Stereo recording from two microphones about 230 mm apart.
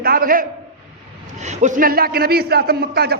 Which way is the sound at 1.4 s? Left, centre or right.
Right.